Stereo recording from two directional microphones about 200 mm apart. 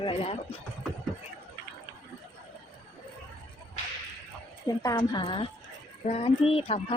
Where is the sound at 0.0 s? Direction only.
25° left (ahead or behind).